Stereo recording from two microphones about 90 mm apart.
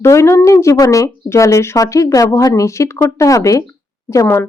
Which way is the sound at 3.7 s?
30° left (ahead or behind).